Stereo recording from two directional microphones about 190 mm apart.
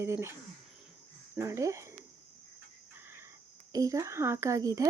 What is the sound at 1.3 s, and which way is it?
Speech, 15° right (ahead or behind).